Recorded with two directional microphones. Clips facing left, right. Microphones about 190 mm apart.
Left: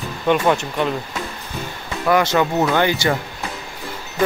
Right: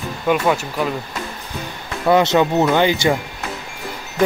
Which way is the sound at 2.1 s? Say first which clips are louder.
Right 3 dB; 20° right (ahead or behind).